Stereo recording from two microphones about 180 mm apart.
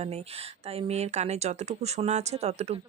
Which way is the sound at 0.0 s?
35° right (ahead or behind).